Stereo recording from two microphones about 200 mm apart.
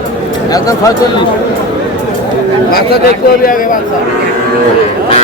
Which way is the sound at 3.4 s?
45° left (ahead or behind).